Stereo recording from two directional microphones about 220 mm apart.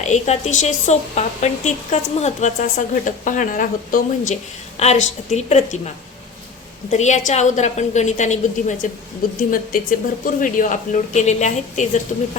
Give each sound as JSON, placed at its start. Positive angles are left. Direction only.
{"t": 0.0, "sound": "a woman's voice", "side_deg": 30}
{"t": 6.9, "sound": "a woman's voice", "side_deg": 30}